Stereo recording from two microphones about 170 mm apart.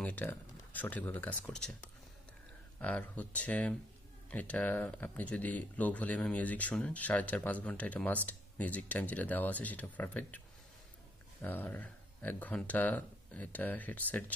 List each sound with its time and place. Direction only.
0.0 s speech: 10° left (ahead or behind)
11.4 s speech: 10° left (ahead or behind)